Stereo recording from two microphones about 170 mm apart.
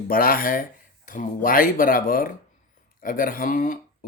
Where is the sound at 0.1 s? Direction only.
55° left (ahead or behind).